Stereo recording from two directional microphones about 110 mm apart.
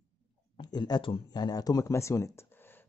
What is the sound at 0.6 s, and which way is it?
A man's voice, 40° left (ahead or behind).